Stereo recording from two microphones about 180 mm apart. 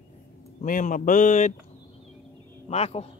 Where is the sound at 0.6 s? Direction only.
50° left (ahead or behind).